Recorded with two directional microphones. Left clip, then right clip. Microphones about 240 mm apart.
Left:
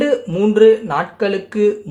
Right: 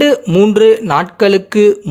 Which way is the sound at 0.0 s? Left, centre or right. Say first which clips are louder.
Right 6 dB; right.